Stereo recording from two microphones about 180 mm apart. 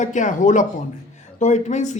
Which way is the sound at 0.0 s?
45° left (ahead or behind).